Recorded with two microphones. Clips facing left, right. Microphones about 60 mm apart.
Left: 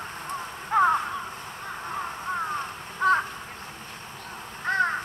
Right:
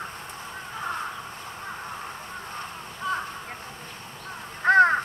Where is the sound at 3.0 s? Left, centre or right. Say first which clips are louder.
Left 8 dB; left.